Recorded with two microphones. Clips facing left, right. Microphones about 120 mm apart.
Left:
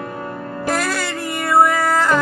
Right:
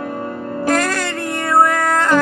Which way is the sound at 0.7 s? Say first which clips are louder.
Right 3 dB; 5° left (ahead or behind).